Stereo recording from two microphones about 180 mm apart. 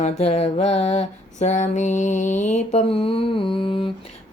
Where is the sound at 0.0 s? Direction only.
35° left (ahead or behind).